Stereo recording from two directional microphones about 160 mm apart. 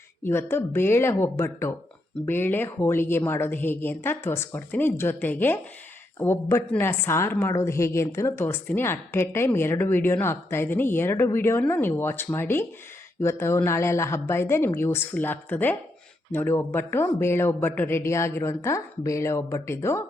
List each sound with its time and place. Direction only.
0.3 s a woman's voice: 15° left (ahead or behind)